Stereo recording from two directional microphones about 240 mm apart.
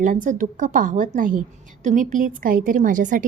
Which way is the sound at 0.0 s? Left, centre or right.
Right.